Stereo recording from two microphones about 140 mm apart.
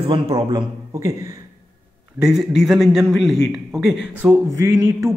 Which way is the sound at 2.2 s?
5° right (ahead or behind).